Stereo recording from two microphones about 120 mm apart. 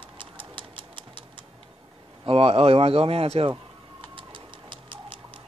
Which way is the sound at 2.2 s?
55° right (ahead or behind).